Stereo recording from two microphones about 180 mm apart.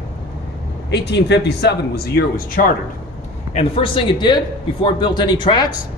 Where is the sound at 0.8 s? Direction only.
70° left (ahead or behind); by 2.6 s 55° left (ahead or behind).